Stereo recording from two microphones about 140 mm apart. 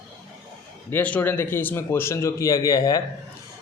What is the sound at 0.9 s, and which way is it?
A man's voice, 10° left (ahead or behind).